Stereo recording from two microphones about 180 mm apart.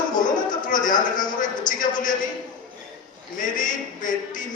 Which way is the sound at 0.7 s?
45° left (ahead or behind).